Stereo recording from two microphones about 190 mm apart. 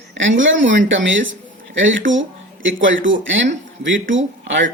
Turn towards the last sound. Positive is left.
turn(degrees=-75)  # may be behind; listen again after turning